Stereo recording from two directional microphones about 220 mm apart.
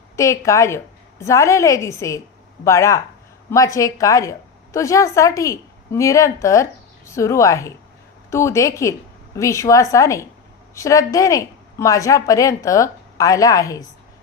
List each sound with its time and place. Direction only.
0.1 s a woman's voice: 15° left (ahead or behind)